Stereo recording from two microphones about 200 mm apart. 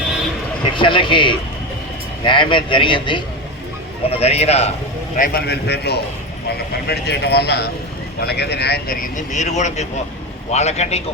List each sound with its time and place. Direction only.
0.6 s a man's voice: 25° left (ahead or behind)
5.1 s a man's voice: 45° left (ahead or behind)